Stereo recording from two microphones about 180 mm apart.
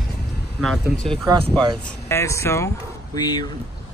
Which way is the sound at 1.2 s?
25° right (ahead or behind).